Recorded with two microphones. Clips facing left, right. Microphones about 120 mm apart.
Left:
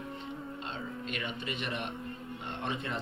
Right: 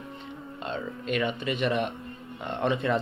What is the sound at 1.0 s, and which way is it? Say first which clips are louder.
Speech: right 13 dB; 75° right (ahead or behind).